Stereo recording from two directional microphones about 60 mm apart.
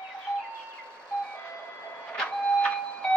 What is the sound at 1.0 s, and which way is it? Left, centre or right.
Vehicle, centre.